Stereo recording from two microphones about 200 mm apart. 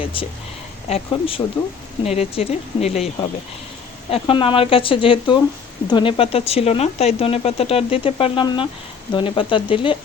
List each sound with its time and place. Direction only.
0.0 s speech: 25° left (ahead or behind)